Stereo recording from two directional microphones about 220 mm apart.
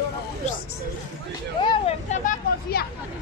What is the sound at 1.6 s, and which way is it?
Vehicle, 30° left (ahead or behind).